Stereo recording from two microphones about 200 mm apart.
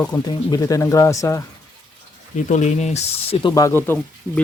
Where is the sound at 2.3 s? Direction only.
35° left (ahead or behind).